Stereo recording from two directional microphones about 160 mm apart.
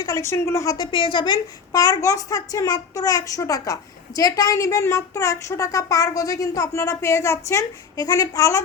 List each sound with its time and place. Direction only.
0.0 s a woman's voice: 20° left (ahead or behind)